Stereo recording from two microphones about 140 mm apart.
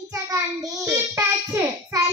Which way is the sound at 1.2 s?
20° right (ahead or behind).